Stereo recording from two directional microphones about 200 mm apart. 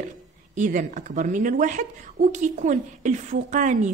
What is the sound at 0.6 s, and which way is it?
Speech, 40° right (ahead or behind).